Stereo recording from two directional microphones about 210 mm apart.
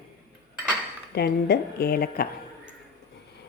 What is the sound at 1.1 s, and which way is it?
A woman's voice, 50° left (ahead or behind).